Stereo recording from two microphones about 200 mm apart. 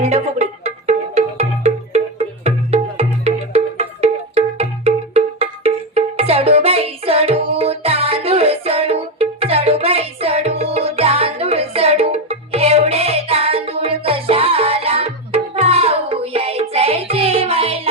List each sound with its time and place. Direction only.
0.1 s music: 35° right (ahead or behind)